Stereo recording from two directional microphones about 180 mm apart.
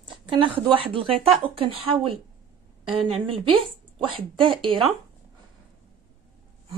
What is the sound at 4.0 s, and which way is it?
Speech, 30° right (ahead or behind).